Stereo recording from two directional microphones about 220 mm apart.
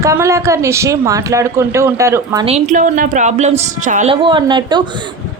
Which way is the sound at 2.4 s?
30° right (ahead or behind).